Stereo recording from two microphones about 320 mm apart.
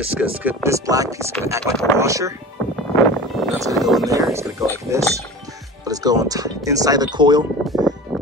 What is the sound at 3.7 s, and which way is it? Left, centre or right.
Speech, centre.